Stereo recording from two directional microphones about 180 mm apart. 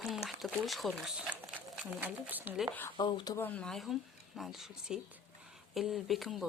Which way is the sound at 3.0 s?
25° left (ahead or behind).